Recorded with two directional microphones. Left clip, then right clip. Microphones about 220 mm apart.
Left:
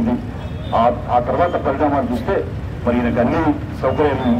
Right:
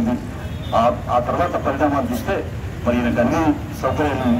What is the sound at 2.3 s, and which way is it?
Speech, 20° left (ahead or behind).